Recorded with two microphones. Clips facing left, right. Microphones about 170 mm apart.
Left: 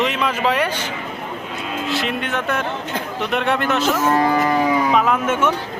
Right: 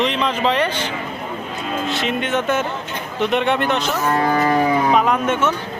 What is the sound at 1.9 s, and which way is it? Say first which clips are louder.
Speech: right 1 dB; centre (ahead or behind).